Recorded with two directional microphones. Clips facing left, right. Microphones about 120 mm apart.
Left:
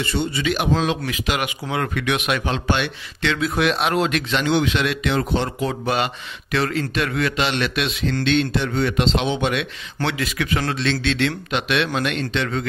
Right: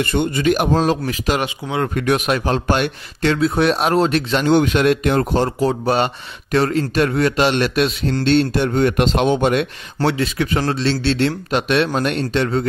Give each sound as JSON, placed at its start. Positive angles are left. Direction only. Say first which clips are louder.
{"t": 0.0, "sound": "speech", "louder": "right 5 dB", "side_deg": -50}